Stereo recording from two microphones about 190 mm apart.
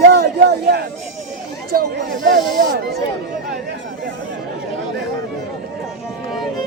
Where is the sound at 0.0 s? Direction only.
60° right (ahead or behind).